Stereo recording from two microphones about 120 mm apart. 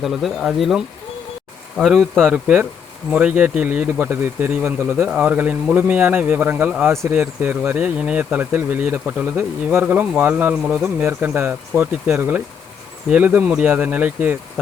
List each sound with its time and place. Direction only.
0.0 s speech: centre (ahead or behind)
2.3 s speech: 10° right (ahead or behind)